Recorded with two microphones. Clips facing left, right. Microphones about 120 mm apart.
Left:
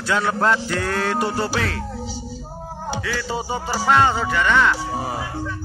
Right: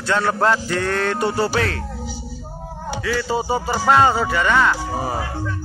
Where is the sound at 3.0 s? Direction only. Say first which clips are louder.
Right 8 dB; centre (ahead or behind).